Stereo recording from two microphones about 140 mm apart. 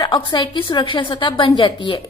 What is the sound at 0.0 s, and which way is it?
A woman's voice, 35° left (ahead or behind).